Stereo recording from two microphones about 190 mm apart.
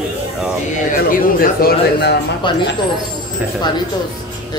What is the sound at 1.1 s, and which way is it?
Speech, 50° left (ahead or behind).